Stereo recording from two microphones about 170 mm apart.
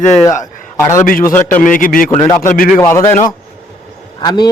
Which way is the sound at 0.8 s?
20° left (ahead or behind).